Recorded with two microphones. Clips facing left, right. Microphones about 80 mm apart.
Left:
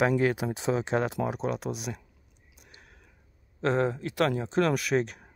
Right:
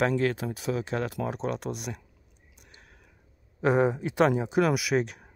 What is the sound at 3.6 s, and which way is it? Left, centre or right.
Speech, centre.